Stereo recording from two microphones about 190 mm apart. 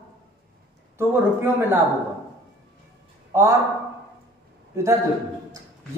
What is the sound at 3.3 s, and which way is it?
Speech, 15° right (ahead or behind).